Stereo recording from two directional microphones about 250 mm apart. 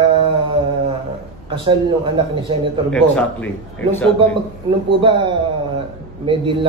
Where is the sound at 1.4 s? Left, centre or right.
Right.